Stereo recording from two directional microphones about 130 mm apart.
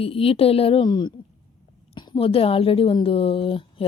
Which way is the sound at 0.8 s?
35° left (ahead or behind).